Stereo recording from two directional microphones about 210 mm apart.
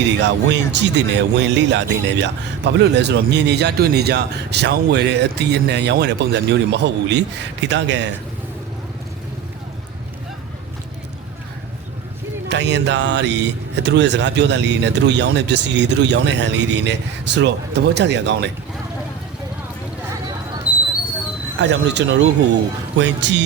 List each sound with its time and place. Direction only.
0.2 s speech: 55° right (ahead or behind)
12.5 s speech: 55° right (ahead or behind)
21.6 s speech: 55° right (ahead or behind)